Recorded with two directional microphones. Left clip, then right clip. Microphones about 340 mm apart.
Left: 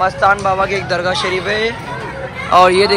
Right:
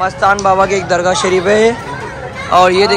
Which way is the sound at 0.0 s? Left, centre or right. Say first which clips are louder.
Right 1 dB; centre.